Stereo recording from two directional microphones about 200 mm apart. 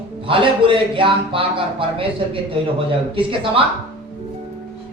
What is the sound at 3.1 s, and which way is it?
Music, 25° right (ahead or behind).